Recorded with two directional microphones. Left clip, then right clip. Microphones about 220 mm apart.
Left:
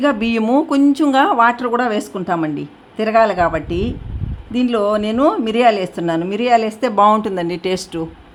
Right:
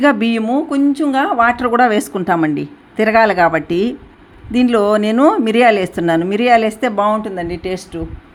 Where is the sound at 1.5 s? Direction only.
5° right (ahead or behind).